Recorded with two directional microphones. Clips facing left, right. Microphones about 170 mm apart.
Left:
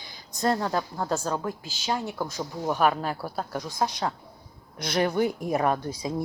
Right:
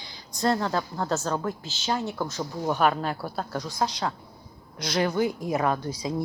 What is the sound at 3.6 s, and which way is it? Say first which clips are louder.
Speech: even; 25° left (ahead or behind).